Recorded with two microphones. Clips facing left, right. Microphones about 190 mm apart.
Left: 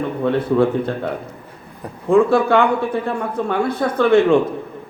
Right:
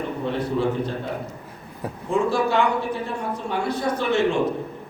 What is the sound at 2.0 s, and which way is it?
Speech, 55° left (ahead or behind).